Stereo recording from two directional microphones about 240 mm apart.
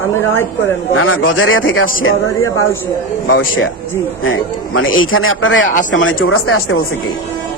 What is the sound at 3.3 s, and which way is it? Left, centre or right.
Speech, left.